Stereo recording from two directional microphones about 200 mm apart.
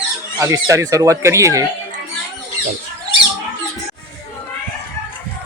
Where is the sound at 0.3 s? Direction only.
15° right (ahead or behind).